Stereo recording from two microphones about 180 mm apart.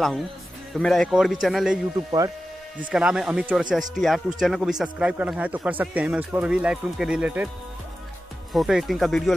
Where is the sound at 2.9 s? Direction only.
5° right (ahead or behind).